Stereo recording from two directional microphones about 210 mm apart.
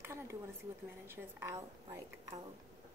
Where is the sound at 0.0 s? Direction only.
10° right (ahead or behind).